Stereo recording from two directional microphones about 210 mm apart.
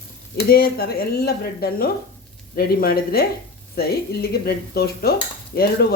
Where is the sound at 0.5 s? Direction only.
45° left (ahead or behind).